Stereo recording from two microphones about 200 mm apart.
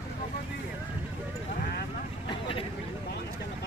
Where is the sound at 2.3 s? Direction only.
25° left (ahead or behind).